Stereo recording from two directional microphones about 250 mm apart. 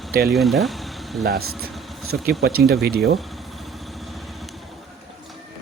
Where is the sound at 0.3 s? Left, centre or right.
Centre.